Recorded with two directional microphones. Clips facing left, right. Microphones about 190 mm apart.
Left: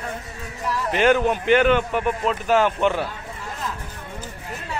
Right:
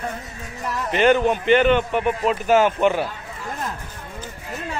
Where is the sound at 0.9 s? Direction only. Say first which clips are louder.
Right 1 dB; 5° left (ahead or behind).